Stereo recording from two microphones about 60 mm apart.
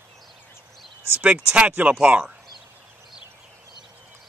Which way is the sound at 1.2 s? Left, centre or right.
Right.